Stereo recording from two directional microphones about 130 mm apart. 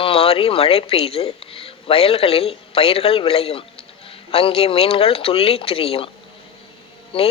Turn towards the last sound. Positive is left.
turn(degrees=45)  # may be behind; listen again after turning